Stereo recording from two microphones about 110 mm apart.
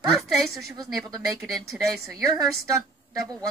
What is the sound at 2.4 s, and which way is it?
Speech, 30° right (ahead or behind).